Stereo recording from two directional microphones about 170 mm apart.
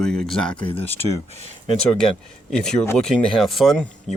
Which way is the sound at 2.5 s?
5° left (ahead or behind).